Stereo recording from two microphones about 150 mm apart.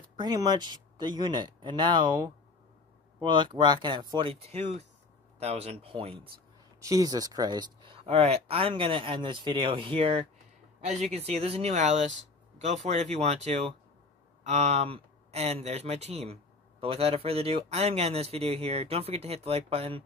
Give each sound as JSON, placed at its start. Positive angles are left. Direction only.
{"t": 0.1, "sound": "speech", "side_deg": -30}
{"t": 6.8, "sound": "speech", "side_deg": -20}